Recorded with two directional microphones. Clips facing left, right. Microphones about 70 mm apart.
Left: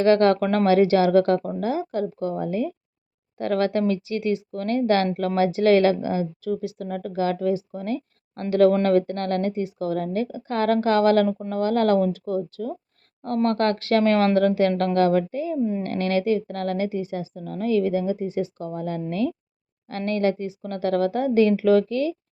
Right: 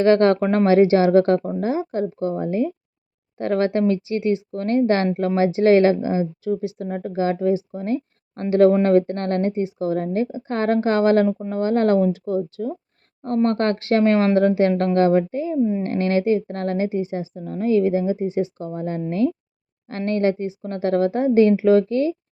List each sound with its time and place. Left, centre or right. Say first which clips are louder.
0.0 s speech: right 2 dB; right
11.3 s speech: right 3 dB; centre
11.5 s speech: right 1 dB; right